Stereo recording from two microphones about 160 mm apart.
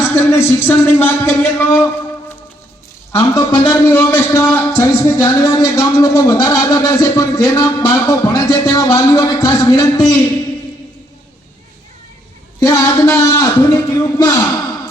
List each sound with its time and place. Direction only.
0.1 s speech: 15° left (ahead or behind)
3.1 s a man's voice: 20° left (ahead or behind)
12.5 s a man's voice: 20° left (ahead or behind)